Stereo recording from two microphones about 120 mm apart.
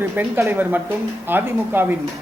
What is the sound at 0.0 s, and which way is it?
A woman's voice, 20° right (ahead or behind).